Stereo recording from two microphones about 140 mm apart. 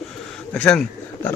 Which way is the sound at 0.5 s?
10° left (ahead or behind).